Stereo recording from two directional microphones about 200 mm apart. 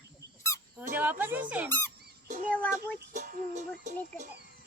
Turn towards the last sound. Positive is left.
turn(degrees=-40)  # may be behind; listen again after turning